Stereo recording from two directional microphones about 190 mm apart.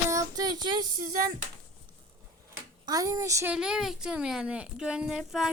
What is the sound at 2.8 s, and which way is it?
Speech, 20° right (ahead or behind).